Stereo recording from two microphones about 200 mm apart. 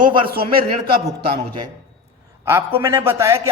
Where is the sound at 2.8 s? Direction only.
15° right (ahead or behind).